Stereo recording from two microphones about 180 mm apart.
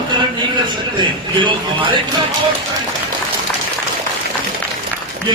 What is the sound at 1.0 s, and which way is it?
Speech, 25° right (ahead or behind).